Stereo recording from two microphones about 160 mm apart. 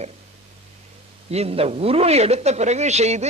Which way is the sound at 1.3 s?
40° right (ahead or behind).